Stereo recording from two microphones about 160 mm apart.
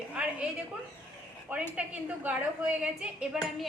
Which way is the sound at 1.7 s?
10° right (ahead or behind).